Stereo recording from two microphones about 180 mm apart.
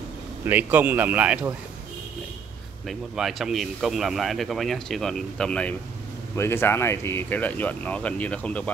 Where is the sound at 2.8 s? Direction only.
Centre (ahead or behind).